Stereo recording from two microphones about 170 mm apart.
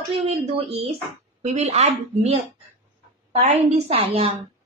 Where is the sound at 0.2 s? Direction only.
35° right (ahead or behind).